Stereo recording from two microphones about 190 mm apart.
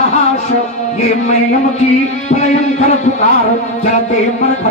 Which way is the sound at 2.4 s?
35° left (ahead or behind).